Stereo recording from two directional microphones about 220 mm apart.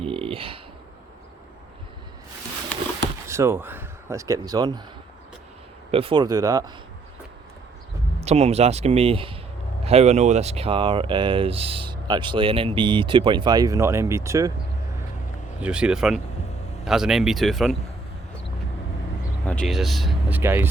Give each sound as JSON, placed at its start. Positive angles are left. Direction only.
{"t": 0.0, "sound": "a sound", "side_deg": -25}
{"t": 3.2, "sound": "speech", "side_deg": -10}
{"t": 5.9, "sound": "speech", "side_deg": -25}
{"t": 8.2, "sound": "speech", "side_deg": -30}
{"t": 15.6, "sound": "speech", "side_deg": -5}
{"t": 19.5, "sound": "speech", "side_deg": 5}
{"t": 20.4, "sound": "speech", "side_deg": -10}